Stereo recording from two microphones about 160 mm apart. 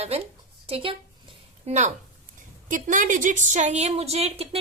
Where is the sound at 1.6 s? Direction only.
50° right (ahead or behind).